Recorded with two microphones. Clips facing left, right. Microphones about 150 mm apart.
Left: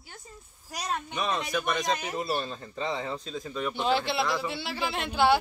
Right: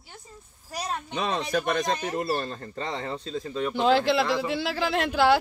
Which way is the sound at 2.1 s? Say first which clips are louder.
Right 3 dB; 55° right (ahead or behind).